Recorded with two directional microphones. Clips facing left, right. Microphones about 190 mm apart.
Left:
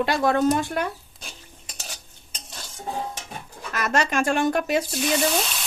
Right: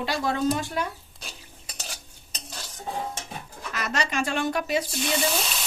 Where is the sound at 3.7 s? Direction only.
50° left (ahead or behind).